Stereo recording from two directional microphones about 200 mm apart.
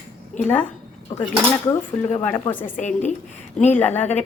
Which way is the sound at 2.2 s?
10° left (ahead or behind).